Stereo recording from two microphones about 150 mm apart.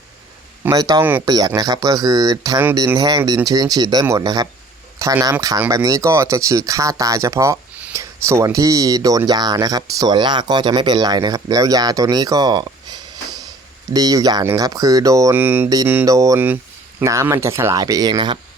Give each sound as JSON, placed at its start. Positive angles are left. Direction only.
{"t": 0.6, "sound": "speech", "side_deg": -25}